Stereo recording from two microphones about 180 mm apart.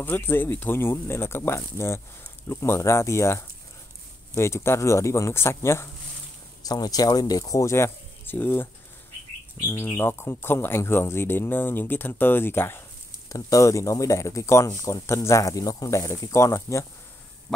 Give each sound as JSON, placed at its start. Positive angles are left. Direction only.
{"t": 0.0, "sound": "speech", "side_deg": 10}
{"t": 9.7, "sound": "speech", "side_deg": 15}